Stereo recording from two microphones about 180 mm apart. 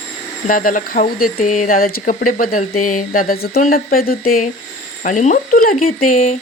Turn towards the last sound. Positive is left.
turn(degrees=50)  # may be behind; listen again after turning